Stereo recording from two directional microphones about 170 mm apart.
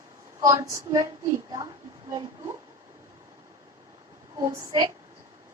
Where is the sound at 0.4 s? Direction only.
20° right (ahead or behind).